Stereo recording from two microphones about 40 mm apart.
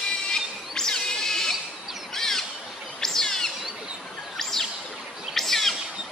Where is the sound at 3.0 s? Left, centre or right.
Centre.